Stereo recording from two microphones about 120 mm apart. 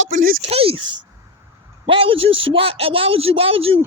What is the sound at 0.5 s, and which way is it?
Speech, 50° right (ahead or behind).